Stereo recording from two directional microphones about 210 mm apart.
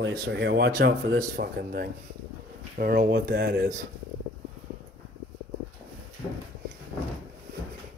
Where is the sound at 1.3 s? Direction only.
45° right (ahead or behind).